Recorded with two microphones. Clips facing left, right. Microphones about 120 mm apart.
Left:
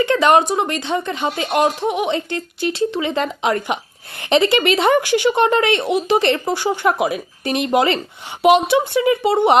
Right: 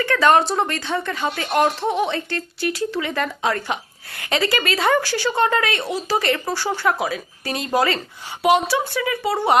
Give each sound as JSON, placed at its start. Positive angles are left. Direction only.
{"t": 0.0, "sound": "a woman's voice", "side_deg": 20}